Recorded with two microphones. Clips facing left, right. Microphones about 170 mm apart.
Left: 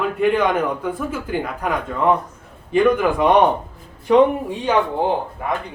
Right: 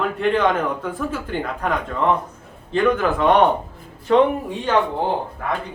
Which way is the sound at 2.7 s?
15° left (ahead or behind).